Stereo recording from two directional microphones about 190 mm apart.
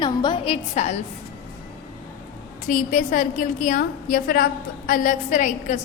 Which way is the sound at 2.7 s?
45° left (ahead or behind).